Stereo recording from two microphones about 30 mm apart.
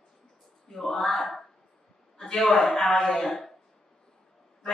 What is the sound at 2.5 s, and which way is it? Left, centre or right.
Speech, centre.